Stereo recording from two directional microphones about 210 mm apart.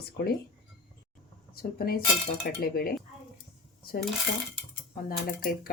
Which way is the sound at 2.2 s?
40° left (ahead or behind).